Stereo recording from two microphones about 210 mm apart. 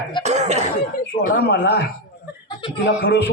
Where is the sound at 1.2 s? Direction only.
40° left (ahead or behind).